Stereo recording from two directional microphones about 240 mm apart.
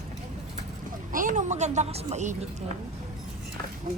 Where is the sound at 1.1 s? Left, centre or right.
Right.